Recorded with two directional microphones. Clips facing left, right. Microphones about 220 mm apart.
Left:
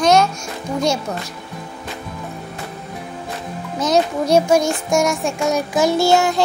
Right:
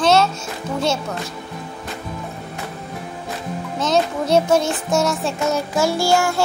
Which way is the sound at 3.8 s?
15° left (ahead or behind).